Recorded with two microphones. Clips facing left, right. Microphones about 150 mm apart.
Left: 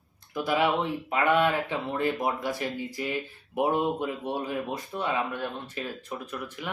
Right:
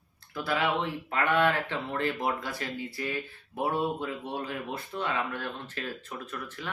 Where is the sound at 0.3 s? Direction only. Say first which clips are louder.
Left 4 dB; 15° left (ahead or behind).